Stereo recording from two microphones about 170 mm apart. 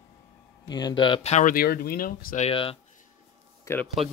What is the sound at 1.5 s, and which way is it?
Speech, 60° left (ahead or behind).